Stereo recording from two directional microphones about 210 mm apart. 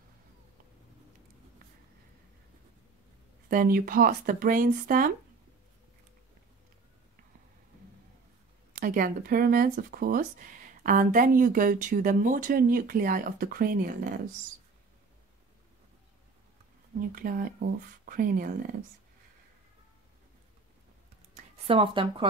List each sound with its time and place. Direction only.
3.4 s speech: 45° right (ahead or behind)
8.7 s speech: 40° right (ahead or behind)
17.1 s speech: 45° right (ahead or behind)
21.4 s speech: 25° right (ahead or behind)